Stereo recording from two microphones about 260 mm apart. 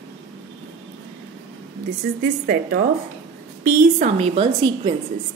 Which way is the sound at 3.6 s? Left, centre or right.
Right.